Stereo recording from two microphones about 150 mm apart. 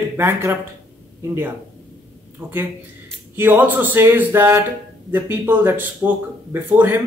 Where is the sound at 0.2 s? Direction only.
15° right (ahead or behind).